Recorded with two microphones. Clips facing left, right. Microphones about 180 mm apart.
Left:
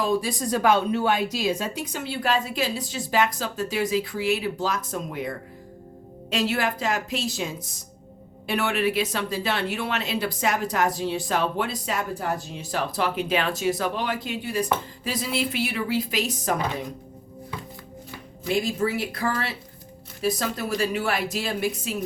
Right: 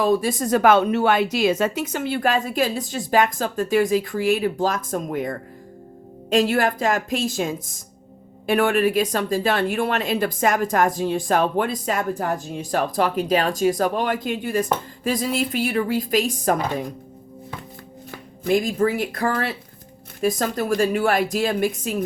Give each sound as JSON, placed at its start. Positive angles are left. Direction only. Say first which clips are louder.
{"t": 0.0, "sound": "a woman's voice", "louder": "right 5 dB", "side_deg": -50}
{"t": 18.4, "sound": "speech", "louder": "right 5 dB", "side_deg": -45}